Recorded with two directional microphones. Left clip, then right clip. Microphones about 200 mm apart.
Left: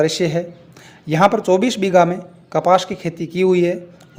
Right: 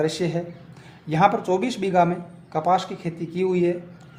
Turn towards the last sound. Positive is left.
turn(degrees=40)  # may be behind; listen again after turning